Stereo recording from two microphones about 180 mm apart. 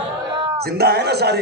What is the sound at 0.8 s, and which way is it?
Speech, 65° right (ahead or behind).